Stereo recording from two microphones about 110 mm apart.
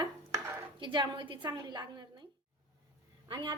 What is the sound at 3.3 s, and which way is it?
Speech, 40° right (ahead or behind).